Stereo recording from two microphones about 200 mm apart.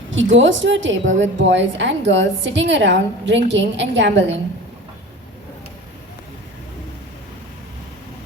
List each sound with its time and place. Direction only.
0.1 s a woman's voice: 70° right (ahead or behind)